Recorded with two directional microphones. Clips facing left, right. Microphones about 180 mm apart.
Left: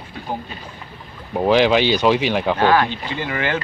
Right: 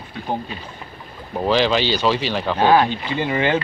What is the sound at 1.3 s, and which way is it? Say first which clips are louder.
Speech: left 3 dB; 15° left (ahead or behind).